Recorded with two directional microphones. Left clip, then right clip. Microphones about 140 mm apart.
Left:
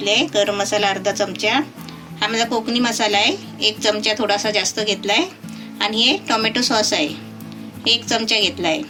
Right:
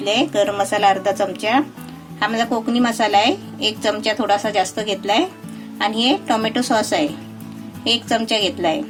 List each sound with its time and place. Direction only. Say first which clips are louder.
0.0 s a woman's voice: even; 85° right; by 8.8 s 70° right (ahead or behind)